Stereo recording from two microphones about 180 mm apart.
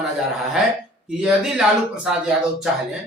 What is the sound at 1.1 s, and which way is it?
Speech, 5° right (ahead or behind).